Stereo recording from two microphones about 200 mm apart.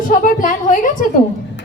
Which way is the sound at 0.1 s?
40° left (ahead or behind).